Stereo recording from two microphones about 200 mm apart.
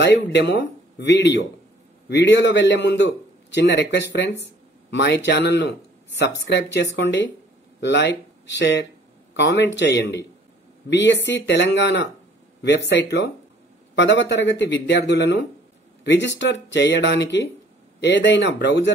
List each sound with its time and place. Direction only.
0.0 s a man's voice: 60° left (ahead or behind)